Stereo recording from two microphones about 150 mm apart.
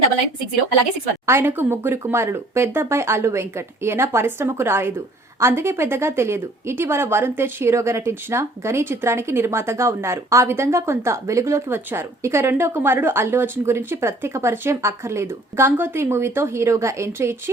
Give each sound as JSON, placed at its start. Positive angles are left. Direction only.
{"t": 1.3, "sound": "speech", "side_deg": -15}